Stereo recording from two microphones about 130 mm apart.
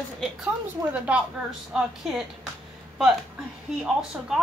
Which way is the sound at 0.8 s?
25° right (ahead or behind).